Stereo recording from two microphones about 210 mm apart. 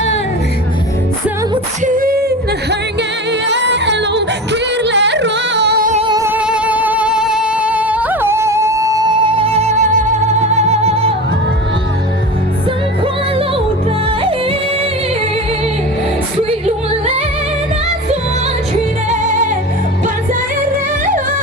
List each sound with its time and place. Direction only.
1.8 s singing: 40° right (ahead or behind)
3.4 s music: 55° right (ahead or behind)
5.9 s music: 25° right (ahead or behind)
6.1 s music: 10° right (ahead or behind); by 11.1 s 30° right (ahead or behind)
16.4 s music: 30° right (ahead or behind)
19.1 s music: 35° right (ahead or behind)